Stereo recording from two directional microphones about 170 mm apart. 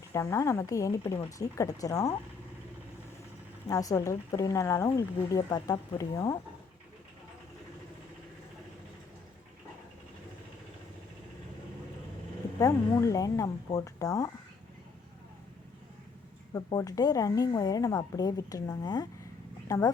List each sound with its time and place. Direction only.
0.1 s speech: 20° left (ahead or behind)
3.7 s speech: 20° left (ahead or behind)
12.5 s speech: 20° left (ahead or behind)
16.6 s speech: 20° left (ahead or behind)